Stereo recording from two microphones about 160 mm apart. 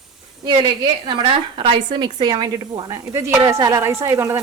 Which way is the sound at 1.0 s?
30° right (ahead or behind).